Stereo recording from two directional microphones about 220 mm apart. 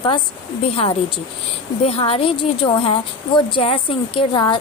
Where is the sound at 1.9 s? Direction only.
25° left (ahead or behind).